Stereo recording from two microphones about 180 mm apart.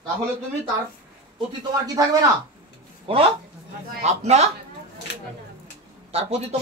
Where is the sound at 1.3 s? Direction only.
20° right (ahead or behind).